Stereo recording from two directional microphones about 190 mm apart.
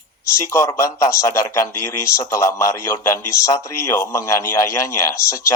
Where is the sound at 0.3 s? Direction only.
15° left (ahead or behind).